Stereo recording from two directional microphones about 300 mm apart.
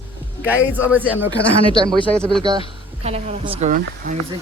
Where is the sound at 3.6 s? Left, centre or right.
Right.